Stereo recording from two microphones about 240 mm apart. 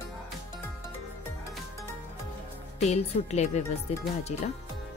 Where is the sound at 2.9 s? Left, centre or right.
Left.